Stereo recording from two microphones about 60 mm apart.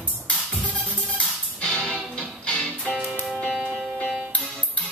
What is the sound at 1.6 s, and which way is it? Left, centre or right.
Music, centre.